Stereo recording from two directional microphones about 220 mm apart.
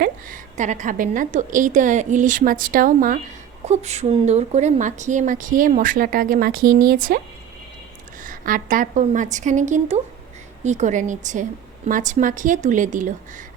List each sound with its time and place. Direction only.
0.0 s a woman's voice: 35° right (ahead or behind)
8.2 s a woman's voice: 40° right (ahead or behind)